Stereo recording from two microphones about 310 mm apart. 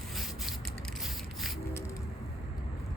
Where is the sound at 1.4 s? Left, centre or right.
Centre.